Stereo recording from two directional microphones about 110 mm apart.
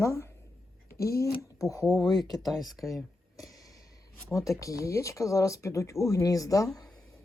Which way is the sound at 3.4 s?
35° left (ahead or behind).